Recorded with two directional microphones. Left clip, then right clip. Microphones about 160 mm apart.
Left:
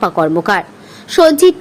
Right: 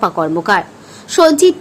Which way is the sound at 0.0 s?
15° left (ahead or behind).